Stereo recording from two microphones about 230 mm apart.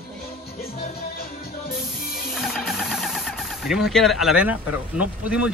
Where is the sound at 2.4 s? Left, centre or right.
Centre.